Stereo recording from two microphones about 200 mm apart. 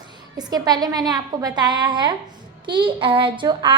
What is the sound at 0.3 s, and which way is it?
A woman's voice, 20° right (ahead or behind).